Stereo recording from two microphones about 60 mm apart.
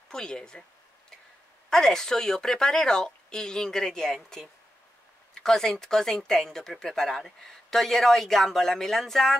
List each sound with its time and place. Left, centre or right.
0.1 s speech: centre
1.7 s speech: centre